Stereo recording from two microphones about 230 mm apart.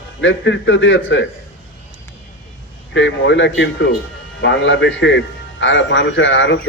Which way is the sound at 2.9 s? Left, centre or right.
Left.